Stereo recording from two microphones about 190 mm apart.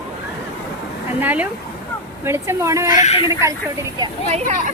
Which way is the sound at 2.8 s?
40° left (ahead or behind).